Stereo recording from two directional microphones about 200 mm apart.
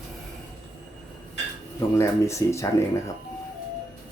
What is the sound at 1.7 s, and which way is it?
Speech, 15° left (ahead or behind).